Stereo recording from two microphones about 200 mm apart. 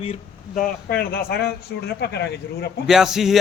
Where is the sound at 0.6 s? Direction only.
45° left (ahead or behind).